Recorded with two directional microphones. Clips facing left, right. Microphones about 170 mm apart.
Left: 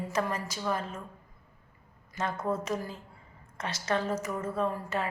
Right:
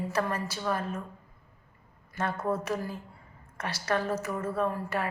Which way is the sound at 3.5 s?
20° left (ahead or behind).